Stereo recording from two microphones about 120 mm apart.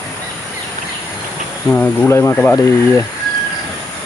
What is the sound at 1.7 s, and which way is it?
Speech, 15° left (ahead or behind).